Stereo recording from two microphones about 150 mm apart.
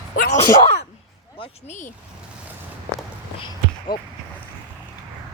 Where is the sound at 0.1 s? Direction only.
70° left (ahead or behind).